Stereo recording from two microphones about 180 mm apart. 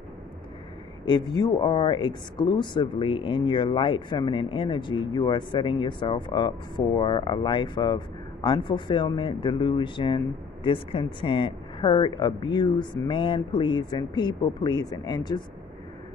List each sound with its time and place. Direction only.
1.4 s speech: 25° left (ahead or behind)